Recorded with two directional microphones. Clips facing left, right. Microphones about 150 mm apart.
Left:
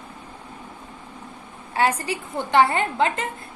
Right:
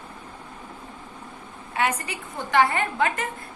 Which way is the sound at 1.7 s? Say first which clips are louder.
Left 4 dB; 30° left (ahead or behind).